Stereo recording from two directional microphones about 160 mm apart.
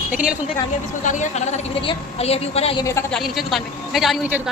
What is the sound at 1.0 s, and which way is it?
Speech, 50° left (ahead or behind).